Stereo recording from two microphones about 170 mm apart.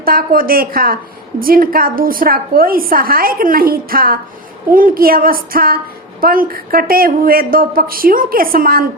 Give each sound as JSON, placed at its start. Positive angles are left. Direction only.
{"t": 0.0, "sound": "a woman's voice", "side_deg": -60}